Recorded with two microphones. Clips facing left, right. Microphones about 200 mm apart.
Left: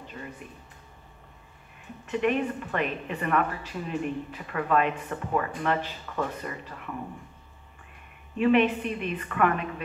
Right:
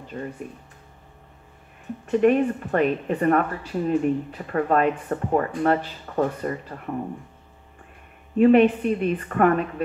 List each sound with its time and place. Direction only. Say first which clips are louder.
0.1 s a woman's voice: right 10 dB; 45° right (ahead or behind)
2.0 s speech: right 8 dB; 40° right (ahead or behind)
8.4 s a woman's voice: right 6 dB; 45° right (ahead or behind)